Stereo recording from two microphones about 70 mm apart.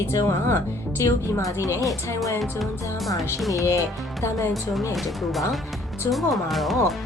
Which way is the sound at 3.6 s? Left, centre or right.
Left.